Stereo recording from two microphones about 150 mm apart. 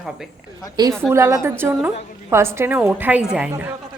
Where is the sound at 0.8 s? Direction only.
20° right (ahead or behind).